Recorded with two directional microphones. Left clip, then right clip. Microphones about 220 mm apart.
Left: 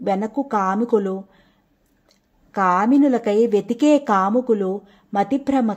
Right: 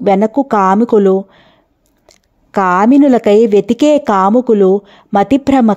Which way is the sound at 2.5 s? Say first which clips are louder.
Right 7 dB; 40° right (ahead or behind).